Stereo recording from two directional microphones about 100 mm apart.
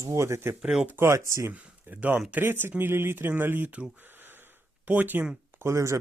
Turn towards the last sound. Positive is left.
turn(degrees=-30)  # may be behind; listen again after turning